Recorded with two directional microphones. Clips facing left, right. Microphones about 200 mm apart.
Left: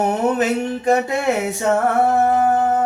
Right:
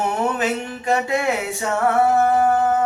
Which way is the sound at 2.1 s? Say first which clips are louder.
Left 1 dB; 40° left (ahead or behind).